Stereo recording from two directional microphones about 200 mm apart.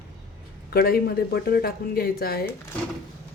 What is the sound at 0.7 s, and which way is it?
Speech, 50° left (ahead or behind).